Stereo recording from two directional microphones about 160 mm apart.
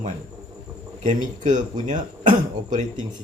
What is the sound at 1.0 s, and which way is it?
Speech, 50° right (ahead or behind).